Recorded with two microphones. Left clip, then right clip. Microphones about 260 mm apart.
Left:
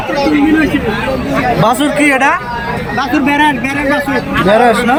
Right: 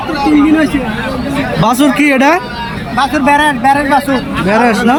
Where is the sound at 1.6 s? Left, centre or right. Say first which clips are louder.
Right 3 dB; centre.